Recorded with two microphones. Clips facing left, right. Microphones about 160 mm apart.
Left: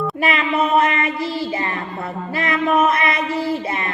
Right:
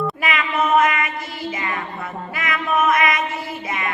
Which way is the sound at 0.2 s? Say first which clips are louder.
Left 6 dB; 30° left (ahead or behind).